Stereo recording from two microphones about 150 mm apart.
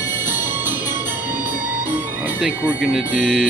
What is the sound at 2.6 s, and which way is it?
Speech, 5° right (ahead or behind).